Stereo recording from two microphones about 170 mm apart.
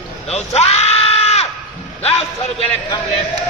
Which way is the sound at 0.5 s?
40° left (ahead or behind).